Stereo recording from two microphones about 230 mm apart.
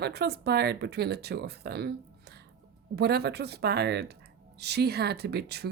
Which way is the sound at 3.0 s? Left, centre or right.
Right.